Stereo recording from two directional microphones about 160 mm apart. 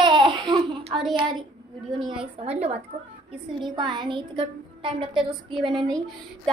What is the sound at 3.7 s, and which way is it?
A woman's voice, 30° right (ahead or behind).